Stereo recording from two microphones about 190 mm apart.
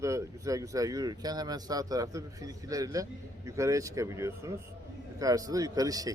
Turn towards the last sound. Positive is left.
turn(degrees=-20)  # may be behind; listen again after turning